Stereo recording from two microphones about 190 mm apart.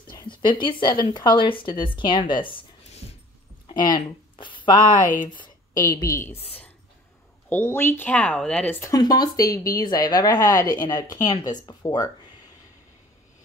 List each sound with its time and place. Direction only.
0.1 s a woman's voice: 25° left (ahead or behind)
7.4 s speech: 10° left (ahead or behind)